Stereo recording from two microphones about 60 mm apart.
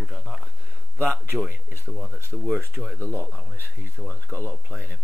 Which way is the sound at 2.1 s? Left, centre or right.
Right.